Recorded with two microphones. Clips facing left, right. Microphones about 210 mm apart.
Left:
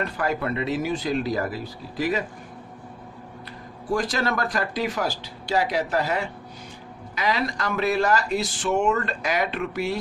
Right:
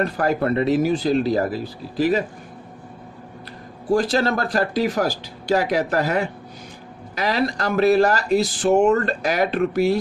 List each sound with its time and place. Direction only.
0.0 s speech: 40° right (ahead or behind)
3.9 s speech: 30° right (ahead or behind); by 6.2 s 50° right (ahead or behind)
7.2 s speech: 35° right (ahead or behind)